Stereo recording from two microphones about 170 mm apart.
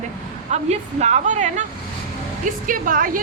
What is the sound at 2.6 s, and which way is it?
Speech, 55° right (ahead or behind).